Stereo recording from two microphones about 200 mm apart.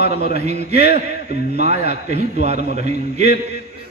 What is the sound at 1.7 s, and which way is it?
A man's voice, 35° right (ahead or behind).